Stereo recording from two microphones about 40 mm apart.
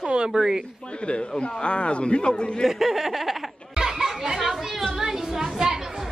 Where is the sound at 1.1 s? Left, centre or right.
Left.